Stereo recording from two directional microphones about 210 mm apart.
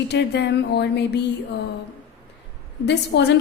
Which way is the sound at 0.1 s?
55° left (ahead or behind).